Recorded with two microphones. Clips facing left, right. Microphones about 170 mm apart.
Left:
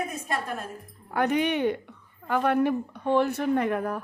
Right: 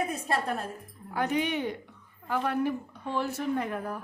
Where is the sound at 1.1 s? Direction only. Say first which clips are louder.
Left 4 dB; 60° left (ahead or behind).